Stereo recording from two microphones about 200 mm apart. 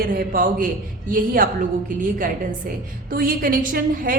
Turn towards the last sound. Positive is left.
turn(degrees=-45)  # may be behind; listen again after turning